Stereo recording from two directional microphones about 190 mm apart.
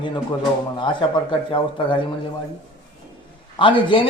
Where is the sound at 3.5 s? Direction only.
25° left (ahead or behind).